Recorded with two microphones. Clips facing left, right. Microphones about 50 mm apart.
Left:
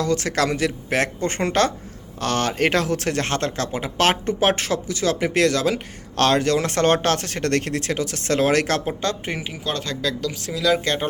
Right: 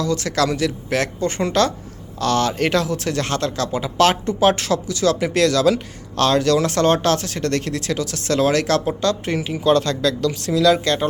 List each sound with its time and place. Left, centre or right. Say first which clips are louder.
0.0 s speech: right 1 dB; left
6.1 s speech: right 2 dB; left
9.2 s speech: right 5 dB; centre
9.5 s speech: right 10 dB; centre